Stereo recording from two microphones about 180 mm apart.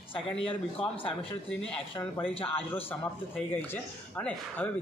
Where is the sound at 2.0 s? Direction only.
10° left (ahead or behind).